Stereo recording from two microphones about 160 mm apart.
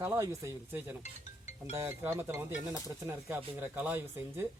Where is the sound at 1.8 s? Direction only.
15° right (ahead or behind).